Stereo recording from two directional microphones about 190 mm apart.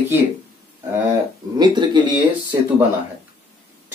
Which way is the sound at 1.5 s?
25° right (ahead or behind).